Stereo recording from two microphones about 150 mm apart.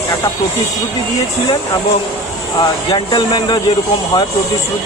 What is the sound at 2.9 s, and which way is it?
Speech, 25° left (ahead or behind).